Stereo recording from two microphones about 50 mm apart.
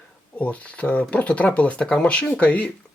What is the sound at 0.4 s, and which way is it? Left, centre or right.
Speech, left.